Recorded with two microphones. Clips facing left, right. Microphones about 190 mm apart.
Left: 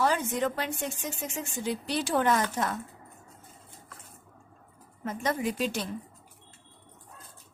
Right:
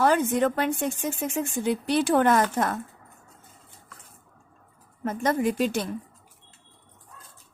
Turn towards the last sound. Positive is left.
turn(degrees=-50)  # may be behind; listen again after turning